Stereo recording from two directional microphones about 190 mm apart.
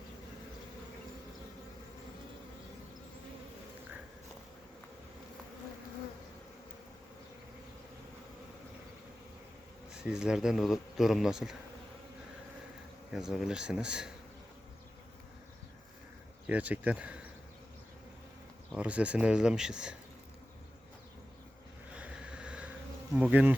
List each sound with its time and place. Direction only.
9.9 s a man's voice: 5° right (ahead or behind)
13.1 s a man's voice: centre (ahead or behind)
16.5 s speech: 5° right (ahead or behind)
18.7 s a man's voice: 5° right (ahead or behind)
21.9 s a sound: 5° right (ahead or behind)
23.1 s speech: 5° right (ahead or behind)